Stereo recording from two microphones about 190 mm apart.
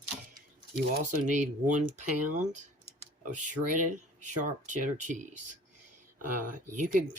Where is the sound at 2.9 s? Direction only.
40° right (ahead or behind).